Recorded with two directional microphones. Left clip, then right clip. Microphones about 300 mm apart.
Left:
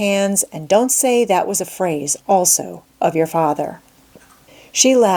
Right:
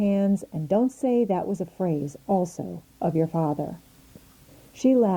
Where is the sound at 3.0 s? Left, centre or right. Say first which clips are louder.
Left 10 dB; centre.